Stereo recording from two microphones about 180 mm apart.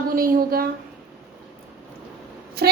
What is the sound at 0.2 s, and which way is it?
Speech, 50° right (ahead or behind).